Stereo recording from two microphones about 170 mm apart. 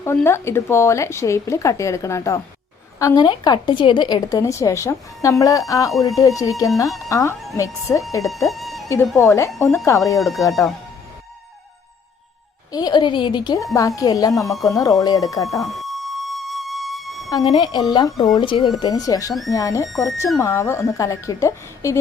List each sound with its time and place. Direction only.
0.0 s a woman's voice: 15° left (ahead or behind)
8.2 s speech: centre (ahead or behind)
9.1 s speech: 15° left (ahead or behind)
10.2 s speech: centre (ahead or behind)
12.7 s a woman's voice: 25° left (ahead or behind)
15.6 s music: centre (ahead or behind)
17.4 s a woman's voice: 30° left (ahead or behind)
19.9 s speech: centre (ahead or behind)
20.4 s speech: 15° left (ahead or behind)